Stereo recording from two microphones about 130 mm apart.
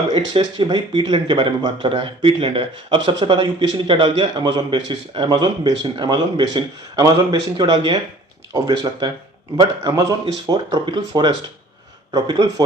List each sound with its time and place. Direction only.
0.1 s speech: 40° right (ahead or behind)